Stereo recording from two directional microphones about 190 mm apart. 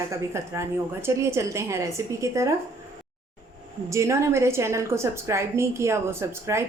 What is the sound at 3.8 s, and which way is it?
Speech, 15° right (ahead or behind).